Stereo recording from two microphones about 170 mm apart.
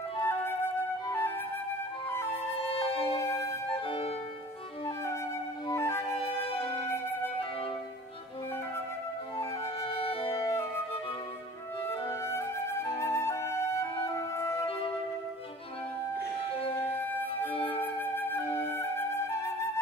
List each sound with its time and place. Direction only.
0.2 s flute: 15° left (ahead or behind)
2.3 s music: 35° left (ahead or behind)
4.8 s flute: 15° left (ahead or behind)
5.7 s music: 15° left (ahead or behind)
6.1 s music: 35° left (ahead or behind)
6.5 s music: 15° left (ahead or behind)
9.8 s music: 35° left (ahead or behind)
10.3 s flute: 15° left (ahead or behind)
12.1 s flute: 15° left (ahead or behind)
16.7 s music: 10° left (ahead or behind)
17.5 s flute: 35° left (ahead or behind)
17.8 s flute: 10° left (ahead or behind)